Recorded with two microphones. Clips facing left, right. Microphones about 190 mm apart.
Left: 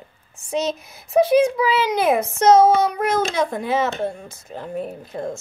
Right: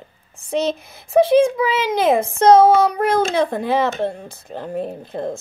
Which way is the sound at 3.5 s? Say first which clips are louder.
Right 2 dB; 60° right (ahead or behind).